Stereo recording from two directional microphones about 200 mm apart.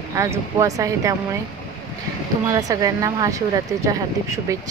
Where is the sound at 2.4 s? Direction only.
20° right (ahead or behind).